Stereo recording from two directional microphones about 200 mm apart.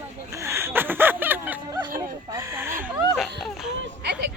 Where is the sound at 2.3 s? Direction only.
10° right (ahead or behind).